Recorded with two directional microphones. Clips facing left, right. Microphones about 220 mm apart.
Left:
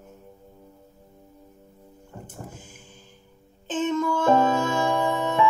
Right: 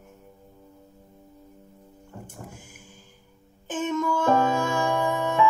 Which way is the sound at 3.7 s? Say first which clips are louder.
Left 2 dB; 25° left (ahead or behind).